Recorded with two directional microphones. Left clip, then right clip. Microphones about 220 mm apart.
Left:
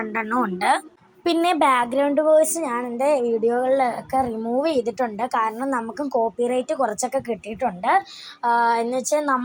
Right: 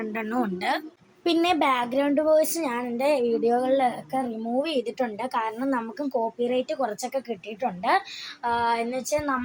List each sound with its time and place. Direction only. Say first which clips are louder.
0.0 s a woman's voice: left 5 dB; centre (ahead or behind)
7.8 s a woman's voice: left 4 dB; centre (ahead or behind)
8.4 s a woman's voice: left 6 dB; 15° left (ahead or behind)